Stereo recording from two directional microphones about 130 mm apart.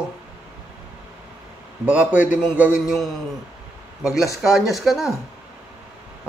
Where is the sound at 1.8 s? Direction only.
10° right (ahead or behind).